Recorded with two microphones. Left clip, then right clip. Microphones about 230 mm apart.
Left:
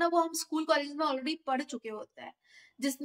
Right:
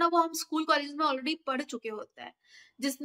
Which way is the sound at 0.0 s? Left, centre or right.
Centre.